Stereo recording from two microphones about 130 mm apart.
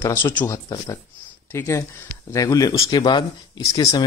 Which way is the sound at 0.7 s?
35° left (ahead or behind).